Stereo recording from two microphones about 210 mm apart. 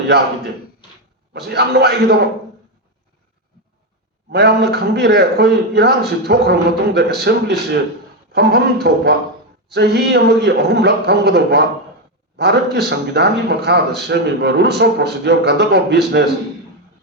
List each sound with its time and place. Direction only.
1.3 s a man's voice: 50° right (ahead or behind)
4.3 s a man's voice: 50° right (ahead or behind)